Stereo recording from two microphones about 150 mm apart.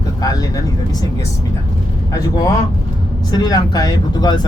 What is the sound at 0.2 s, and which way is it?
Vehicle, 25° left (ahead or behind).